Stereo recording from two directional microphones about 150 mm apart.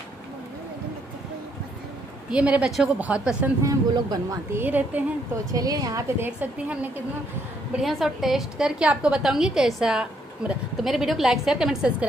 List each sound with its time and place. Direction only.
2.3 s a woman's voice: 10° right (ahead or behind)
3.6 s a woman's voice: 25° right (ahead or behind)
4.6 s a woman's voice: 10° right (ahead or behind)
5.5 s a woman's voice: 25° right (ahead or behind); by 12.1 s 5° right (ahead or behind)